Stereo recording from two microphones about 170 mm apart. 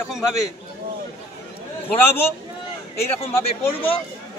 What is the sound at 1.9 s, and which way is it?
Speech, 15° left (ahead or behind).